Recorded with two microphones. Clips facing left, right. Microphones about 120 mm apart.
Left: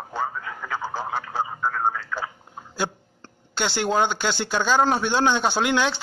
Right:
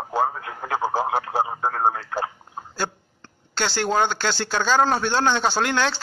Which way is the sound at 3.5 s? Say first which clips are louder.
Even; 15° left (ahead or behind).